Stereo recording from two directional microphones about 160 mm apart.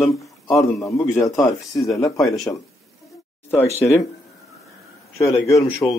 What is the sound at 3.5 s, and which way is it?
Speech, 15° left (ahead or behind).